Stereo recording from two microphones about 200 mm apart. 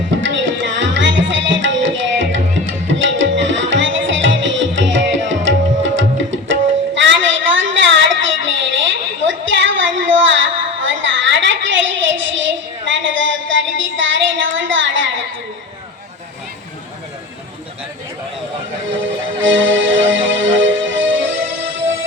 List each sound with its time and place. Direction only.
0.2 s tabla: 65° right (ahead or behind)
12.9 s a sound: 70° right (ahead or behind)
19.4 s music: 70° right (ahead or behind)